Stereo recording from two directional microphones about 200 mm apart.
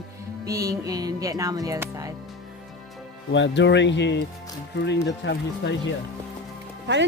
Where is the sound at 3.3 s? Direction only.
65° left (ahead or behind).